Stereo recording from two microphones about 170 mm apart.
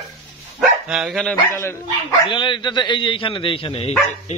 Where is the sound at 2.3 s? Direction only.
30° left (ahead or behind).